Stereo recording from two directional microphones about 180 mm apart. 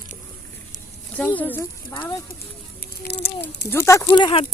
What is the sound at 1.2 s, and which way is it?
Speech, 10° left (ahead or behind).